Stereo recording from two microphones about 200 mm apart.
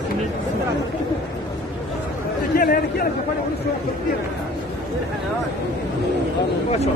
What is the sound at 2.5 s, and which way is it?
Chatter, 50° left (ahead or behind).